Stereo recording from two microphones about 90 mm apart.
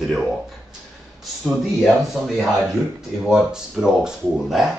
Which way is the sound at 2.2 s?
Centre (ahead or behind).